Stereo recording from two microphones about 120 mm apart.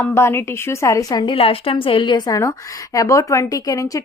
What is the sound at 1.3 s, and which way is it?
A woman's voice, 50° left (ahead or behind).